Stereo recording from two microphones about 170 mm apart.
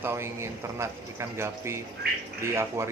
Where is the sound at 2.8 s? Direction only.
15° right (ahead or behind).